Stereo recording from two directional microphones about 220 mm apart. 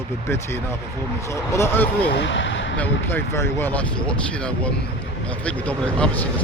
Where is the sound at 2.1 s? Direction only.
55° left (ahead or behind).